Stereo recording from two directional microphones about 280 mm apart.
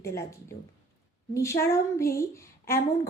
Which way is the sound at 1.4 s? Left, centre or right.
Centre.